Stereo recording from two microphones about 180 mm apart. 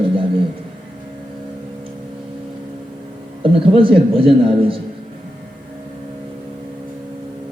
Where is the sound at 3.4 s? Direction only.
30° right (ahead or behind).